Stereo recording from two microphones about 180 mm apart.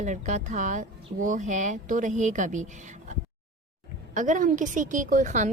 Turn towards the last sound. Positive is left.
turn(degrees=-45)  # may be behind; listen again after turning